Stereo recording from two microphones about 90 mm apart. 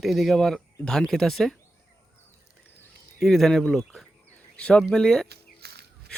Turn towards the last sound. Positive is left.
turn(degrees=5)  # may be behind; listen again after turning